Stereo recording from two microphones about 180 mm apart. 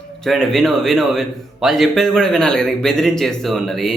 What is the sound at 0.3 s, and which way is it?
Speech, centre (ahead or behind).